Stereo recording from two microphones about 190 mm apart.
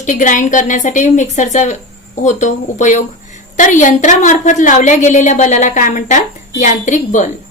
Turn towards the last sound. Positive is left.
turn(degrees=40)  # may be behind; listen again after turning